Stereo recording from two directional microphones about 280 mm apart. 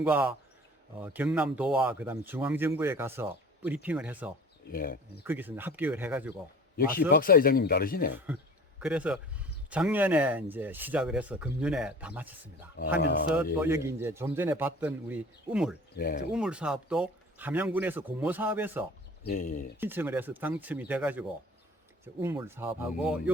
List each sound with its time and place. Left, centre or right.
0.0 s speech: centre
4.7 s speech: left
5.2 s a man's voice: centre
6.7 s speech: left
8.8 s speech: centre
13.3 s a man's voice: centre
16.0 s speech: left
16.3 s speech: centre
19.2 s speech: left
19.8 s a man's voice: centre